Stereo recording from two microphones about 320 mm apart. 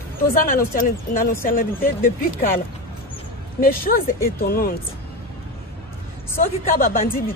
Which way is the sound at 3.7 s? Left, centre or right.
Left.